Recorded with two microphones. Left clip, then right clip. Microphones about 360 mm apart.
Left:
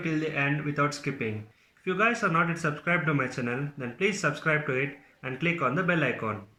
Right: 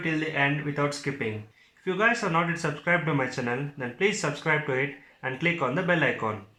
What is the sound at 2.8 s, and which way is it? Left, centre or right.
Speech, centre.